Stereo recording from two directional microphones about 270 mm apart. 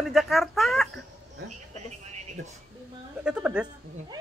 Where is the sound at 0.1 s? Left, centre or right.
Centre.